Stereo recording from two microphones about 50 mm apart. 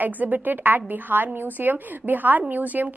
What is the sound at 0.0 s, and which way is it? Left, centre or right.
A woman's voice, right.